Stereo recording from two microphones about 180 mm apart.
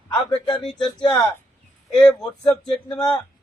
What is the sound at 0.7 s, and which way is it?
Speech, 25° left (ahead or behind).